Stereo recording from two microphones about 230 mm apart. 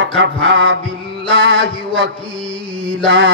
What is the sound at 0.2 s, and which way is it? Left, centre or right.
Speech, right.